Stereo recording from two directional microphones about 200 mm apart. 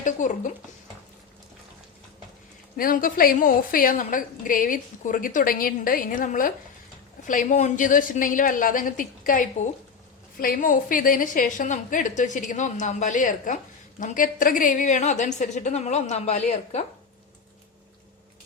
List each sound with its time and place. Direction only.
0.0 s a woman's voice: 40° left (ahead or behind)
2.7 s a woman's voice: 45° left (ahead or behind)